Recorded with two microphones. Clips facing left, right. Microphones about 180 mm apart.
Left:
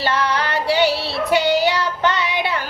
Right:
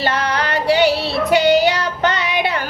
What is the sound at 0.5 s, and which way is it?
Female singing, 15° right (ahead or behind).